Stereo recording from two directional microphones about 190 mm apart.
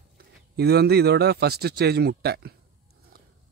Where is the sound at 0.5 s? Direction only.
55° right (ahead or behind).